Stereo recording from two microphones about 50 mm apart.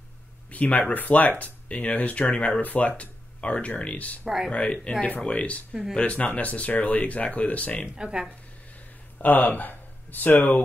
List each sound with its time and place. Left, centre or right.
0.5 s speech: left
2.3 s speech: left
2.6 s speech: left
7.8 s speech: centre
9.2 s speech: left